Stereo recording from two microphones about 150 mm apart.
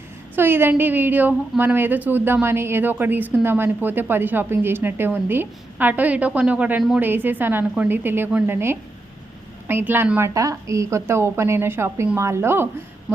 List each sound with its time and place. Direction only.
0.3 s speech: 15° right (ahead or behind)